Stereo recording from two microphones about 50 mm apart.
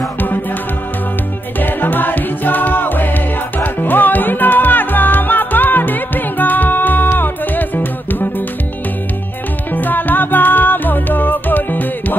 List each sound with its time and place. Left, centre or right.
1.6 s music: left
9.7 s music: left